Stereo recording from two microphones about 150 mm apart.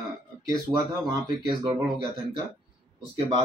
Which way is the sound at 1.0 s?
25° right (ahead or behind).